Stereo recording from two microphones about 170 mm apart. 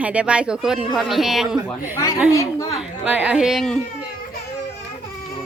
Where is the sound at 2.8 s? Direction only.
5° right (ahead or behind).